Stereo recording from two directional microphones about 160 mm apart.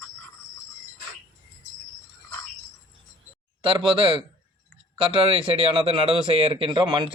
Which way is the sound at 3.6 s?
35° right (ahead or behind).